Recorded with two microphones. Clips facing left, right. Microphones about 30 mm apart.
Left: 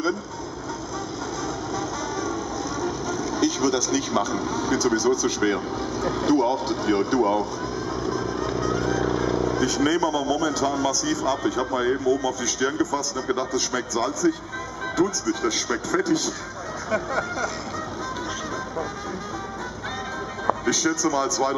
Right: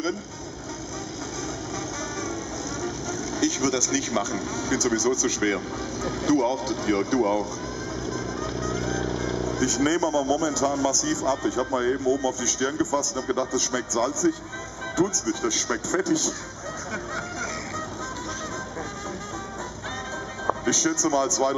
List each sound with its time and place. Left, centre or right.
2.8 s speech: left
8.0 s vehicle: left
9.8 s a man's voice: left
16.9 s a man's voice: left
20.6 s speech: left
21.4 s a man's voice: centre